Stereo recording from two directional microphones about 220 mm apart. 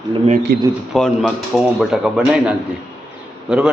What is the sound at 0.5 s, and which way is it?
Speech, 45° right (ahead or behind).